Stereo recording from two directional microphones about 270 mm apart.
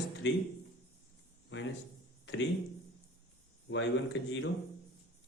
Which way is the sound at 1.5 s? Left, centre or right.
Left.